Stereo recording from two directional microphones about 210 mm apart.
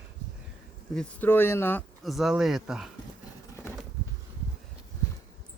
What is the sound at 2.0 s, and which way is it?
Speech, centre (ahead or behind).